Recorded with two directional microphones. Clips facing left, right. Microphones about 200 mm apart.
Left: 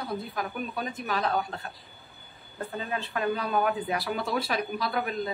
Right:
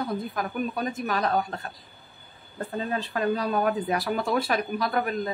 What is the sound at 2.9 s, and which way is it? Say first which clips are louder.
A woman's voice: right 3 dB; 35° right (ahead or behind).